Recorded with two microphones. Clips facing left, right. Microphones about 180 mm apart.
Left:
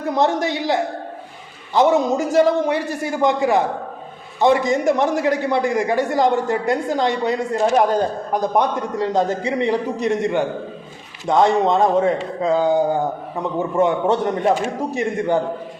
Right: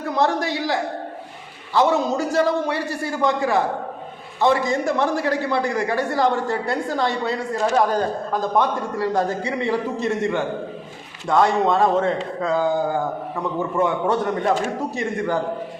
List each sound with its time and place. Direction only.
0.2 s a man's voice: 20° left (ahead or behind)